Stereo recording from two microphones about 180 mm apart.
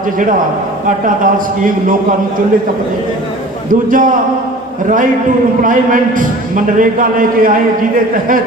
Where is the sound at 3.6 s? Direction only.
50° right (ahead or behind).